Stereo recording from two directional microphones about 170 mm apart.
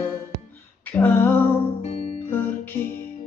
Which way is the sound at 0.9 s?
10° left (ahead or behind).